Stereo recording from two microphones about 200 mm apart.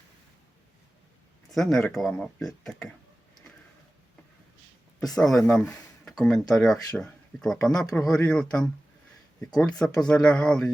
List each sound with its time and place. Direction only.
1.5 s speech: centre (ahead or behind)
4.9 s speech: centre (ahead or behind)
7.8 s speech: 20° left (ahead or behind)
8.2 s speech: 5° left (ahead or behind)
9.6 s speech: 5° left (ahead or behind)